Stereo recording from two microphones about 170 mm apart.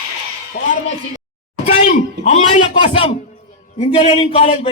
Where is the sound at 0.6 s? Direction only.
50° left (ahead or behind).